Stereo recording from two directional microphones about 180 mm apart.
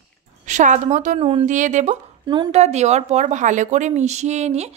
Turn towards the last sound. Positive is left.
turn(degrees=-40)  # may be behind; listen again after turning